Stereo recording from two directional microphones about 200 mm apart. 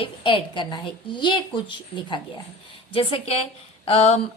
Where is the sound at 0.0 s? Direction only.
25° left (ahead or behind).